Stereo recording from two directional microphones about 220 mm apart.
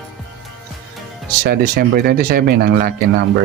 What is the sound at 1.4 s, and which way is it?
Speech, 40° right (ahead or behind).